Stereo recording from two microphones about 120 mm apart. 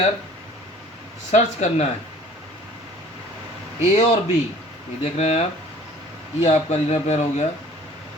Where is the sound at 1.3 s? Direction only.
70° left (ahead or behind).